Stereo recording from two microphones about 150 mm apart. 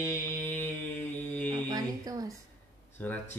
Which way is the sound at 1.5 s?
25° right (ahead or behind).